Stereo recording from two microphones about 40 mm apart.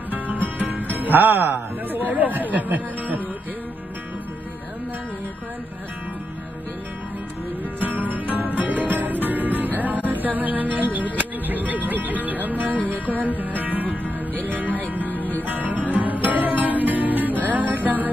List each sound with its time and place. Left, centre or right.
0.1 s music: right
7.8 s music: right
15.0 s music: left
15.4 s music: right